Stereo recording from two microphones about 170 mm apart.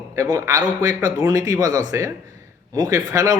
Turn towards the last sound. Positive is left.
turn(degrees=-20)  # may be behind; listen again after turning